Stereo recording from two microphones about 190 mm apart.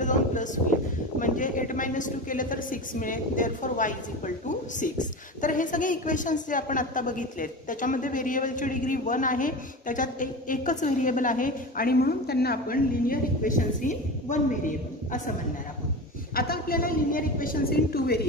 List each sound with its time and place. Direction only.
0.0 s a woman's voice: 40° left (ahead or behind)
16.3 s a woman's voice: 55° left (ahead or behind)